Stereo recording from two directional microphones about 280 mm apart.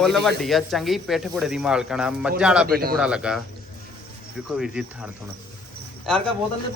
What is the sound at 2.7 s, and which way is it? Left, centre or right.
Speech, right.